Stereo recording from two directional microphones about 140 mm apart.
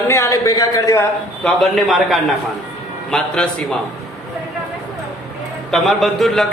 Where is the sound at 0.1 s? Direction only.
20° left (ahead or behind).